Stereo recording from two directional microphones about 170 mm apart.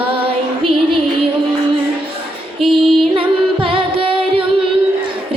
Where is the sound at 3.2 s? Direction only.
30° right (ahead or behind).